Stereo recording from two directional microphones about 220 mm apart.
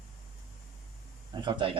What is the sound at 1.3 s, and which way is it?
Speech, 20° right (ahead or behind).